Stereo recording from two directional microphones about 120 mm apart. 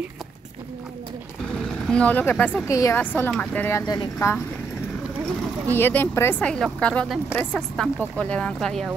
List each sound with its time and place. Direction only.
1.9 s speech: 10° left (ahead or behind)
2.6 s a woman's voice: 25° left (ahead or behind)
3.0 s speech: 15° left (ahead or behind)
3.8 s speech: 35° left (ahead or behind)
5.7 s speech: 15° left (ahead or behind)
6.4 s a woman's voice: 5° left (ahead or behind)